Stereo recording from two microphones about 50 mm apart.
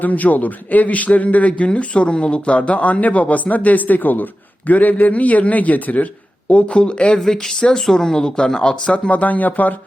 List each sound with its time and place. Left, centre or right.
0.0 s speech: left
7.2 s speech: centre; by 9.7 s left